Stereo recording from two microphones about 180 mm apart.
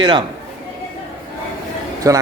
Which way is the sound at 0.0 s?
25° right (ahead or behind).